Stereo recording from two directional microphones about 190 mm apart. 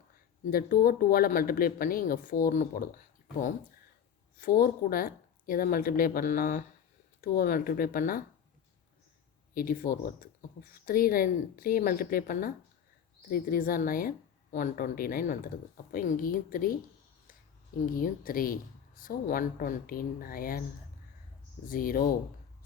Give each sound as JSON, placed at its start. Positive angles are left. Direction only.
{"t": 0.5, "sound": "speech", "side_deg": 50}
{"t": 4.4, "sound": "speech", "side_deg": 50}
{"t": 9.6, "sound": "speech", "side_deg": 50}
{"t": 17.8, "sound": "speech", "side_deg": 45}
{"t": 21.7, "sound": "speech", "side_deg": 50}